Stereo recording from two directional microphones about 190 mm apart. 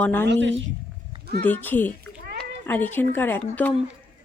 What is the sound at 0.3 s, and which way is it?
Speech, 70° right (ahead or behind).